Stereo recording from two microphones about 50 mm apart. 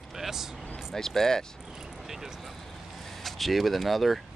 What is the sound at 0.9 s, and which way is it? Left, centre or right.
Speech, centre.